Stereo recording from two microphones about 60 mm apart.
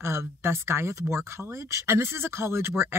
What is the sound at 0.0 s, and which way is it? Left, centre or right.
Speech, right.